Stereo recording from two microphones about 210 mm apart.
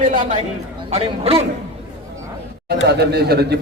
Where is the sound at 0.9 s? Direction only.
30° right (ahead or behind).